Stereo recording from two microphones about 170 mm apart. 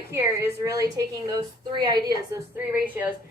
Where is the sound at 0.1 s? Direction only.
15° right (ahead or behind).